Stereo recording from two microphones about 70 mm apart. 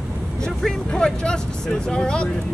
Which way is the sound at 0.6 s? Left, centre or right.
Centre.